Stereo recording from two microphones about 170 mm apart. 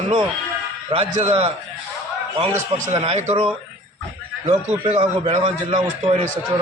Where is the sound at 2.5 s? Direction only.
40° right (ahead or behind).